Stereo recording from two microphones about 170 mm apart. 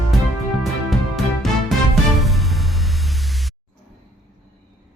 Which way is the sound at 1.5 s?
Centre (ahead or behind).